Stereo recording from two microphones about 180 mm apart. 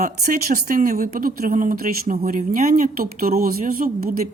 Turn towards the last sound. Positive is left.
turn(degrees=-55)  # may be behind; listen again after turning